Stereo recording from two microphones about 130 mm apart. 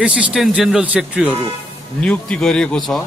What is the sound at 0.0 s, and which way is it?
Speech, 10° right (ahead or behind).